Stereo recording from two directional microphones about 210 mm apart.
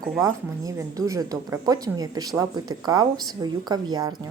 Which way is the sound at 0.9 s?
15° right (ahead or behind).